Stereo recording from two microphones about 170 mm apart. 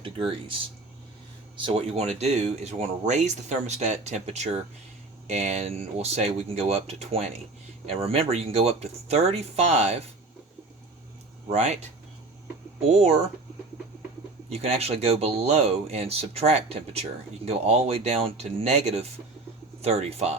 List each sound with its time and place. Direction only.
0.0 s speech: 30° right (ahead or behind)
1.5 s speech: 35° right (ahead or behind)
11.4 s speech: 40° right (ahead or behind)
12.9 s speech: 40° right (ahead or behind)
14.5 s speech: 35° right (ahead or behind)